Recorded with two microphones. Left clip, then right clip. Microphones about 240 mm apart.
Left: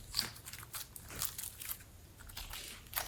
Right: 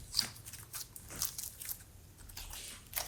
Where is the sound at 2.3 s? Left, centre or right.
Centre.